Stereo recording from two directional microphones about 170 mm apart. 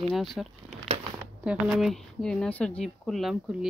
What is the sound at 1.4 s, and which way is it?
Speech, 5° right (ahead or behind).